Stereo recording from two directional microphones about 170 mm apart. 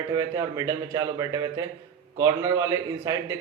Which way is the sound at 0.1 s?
20° right (ahead or behind).